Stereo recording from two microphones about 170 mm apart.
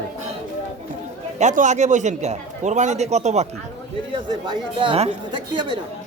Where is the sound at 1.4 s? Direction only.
45° right (ahead or behind).